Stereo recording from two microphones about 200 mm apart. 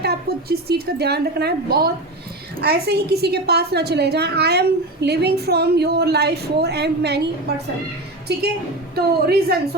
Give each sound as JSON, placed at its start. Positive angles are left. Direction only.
{"t": 0.0, "sound": "a woman's voice", "side_deg": -50}
{"t": 9.0, "sound": "a woman's voice", "side_deg": -50}